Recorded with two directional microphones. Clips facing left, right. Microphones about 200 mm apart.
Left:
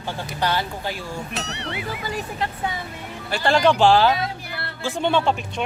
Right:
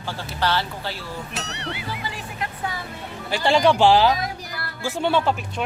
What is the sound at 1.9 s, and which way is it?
Speech, 45° left (ahead or behind).